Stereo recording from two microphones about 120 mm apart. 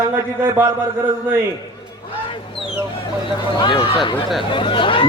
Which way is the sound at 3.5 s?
45° left (ahead or behind).